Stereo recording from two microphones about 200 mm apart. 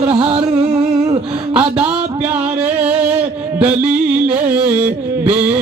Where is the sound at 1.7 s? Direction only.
5° right (ahead or behind).